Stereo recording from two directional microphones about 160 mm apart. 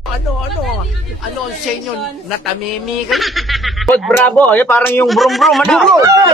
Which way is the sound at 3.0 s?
Centre (ahead or behind).